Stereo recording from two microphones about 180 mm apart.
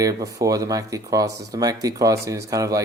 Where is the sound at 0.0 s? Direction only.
20° right (ahead or behind).